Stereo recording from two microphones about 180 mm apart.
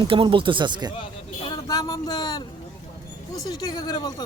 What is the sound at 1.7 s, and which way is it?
Speech, 20° left (ahead or behind).